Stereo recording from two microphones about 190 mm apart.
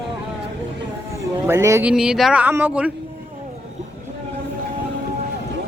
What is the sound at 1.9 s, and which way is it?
Speech, 5° right (ahead or behind).